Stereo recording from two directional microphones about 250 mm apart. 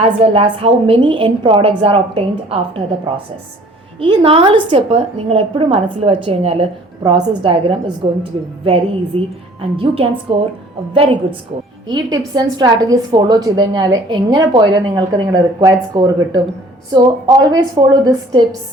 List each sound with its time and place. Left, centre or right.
0.2 s a woman's voice: right
4.0 s a woman's voice: right